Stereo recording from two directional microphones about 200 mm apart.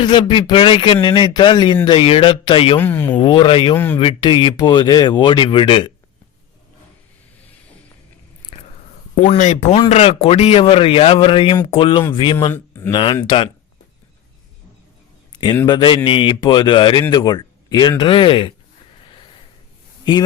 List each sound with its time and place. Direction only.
0.0 s speech: 25° left (ahead or behind)
2.8 s speech: 10° left (ahead or behind)
3.2 s speech: 25° left (ahead or behind)
9.1 s speech: 30° left (ahead or behind)
12.5 s speech: 15° left (ahead or behind)
13.2 s speech: 25° left (ahead or behind)
15.6 s speech: 25° left (ahead or behind)
20.1 s speech: 25° left (ahead or behind)